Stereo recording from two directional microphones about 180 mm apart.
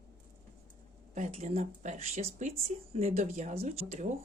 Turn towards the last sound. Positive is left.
turn(degrees=-40)  # may be behind; listen again after turning